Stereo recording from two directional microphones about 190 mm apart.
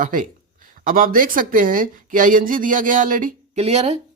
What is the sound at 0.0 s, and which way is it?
Speech, 45° right (ahead or behind).